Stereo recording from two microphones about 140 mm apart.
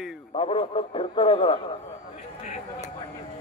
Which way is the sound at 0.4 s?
45° left (ahead or behind).